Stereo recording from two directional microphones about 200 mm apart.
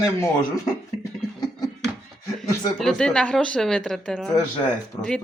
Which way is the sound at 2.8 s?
5° left (ahead or behind).